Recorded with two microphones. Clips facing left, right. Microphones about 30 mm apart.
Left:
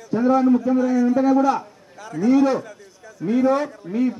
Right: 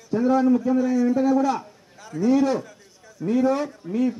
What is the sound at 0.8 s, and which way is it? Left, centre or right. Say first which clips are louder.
Speech: left 2 dB; left.